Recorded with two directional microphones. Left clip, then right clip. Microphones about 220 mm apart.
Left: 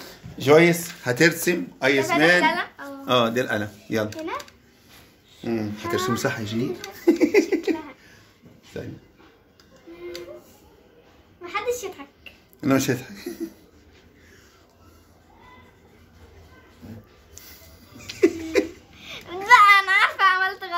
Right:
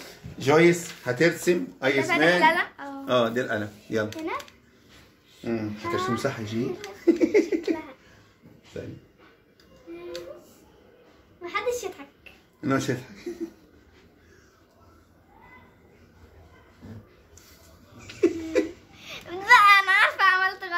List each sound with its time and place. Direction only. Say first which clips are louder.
0.4 s speech: left 3 dB; 35° left (ahead or behind)
2.4 s speech: right 1 dB; 20° right (ahead or behind)
3.1 s speech: left 3 dB; 40° left (ahead or behind)
5.4 s speech: left 2 dB; 40° left (ahead or behind)
7.1 s a sound: left 2 dB; 50° left (ahead or behind)
8.7 s speech: left 2 dB; 40° left (ahead or behind)
11.4 s a sound: left 1 dB; 5° right (ahead or behind)
12.5 s speech: left 4 dB; 45° left (ahead or behind)
17.9 s laughter: left 3 dB; 40° left (ahead or behind)
18.9 s a sound: left 4 dB; 15° right (ahead or behind)